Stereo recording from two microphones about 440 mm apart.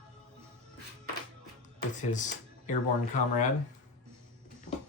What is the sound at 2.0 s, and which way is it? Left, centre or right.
Speech, centre.